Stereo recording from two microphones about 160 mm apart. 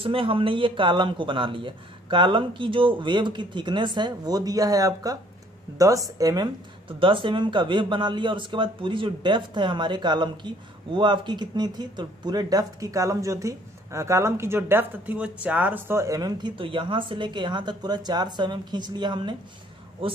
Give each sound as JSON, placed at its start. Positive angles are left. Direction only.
{"t": 0.0, "sound": "speech", "side_deg": -35}